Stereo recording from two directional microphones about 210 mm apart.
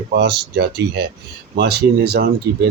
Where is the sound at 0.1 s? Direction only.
50° right (ahead or behind).